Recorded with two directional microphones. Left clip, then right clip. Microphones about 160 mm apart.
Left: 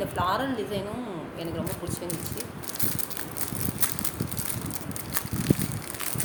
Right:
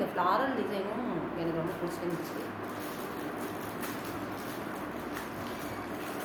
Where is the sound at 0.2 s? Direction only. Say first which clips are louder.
Left 1 dB; 60° left (ahead or behind).